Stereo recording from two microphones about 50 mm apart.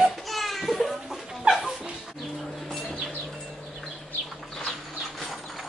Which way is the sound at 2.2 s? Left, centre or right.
Centre.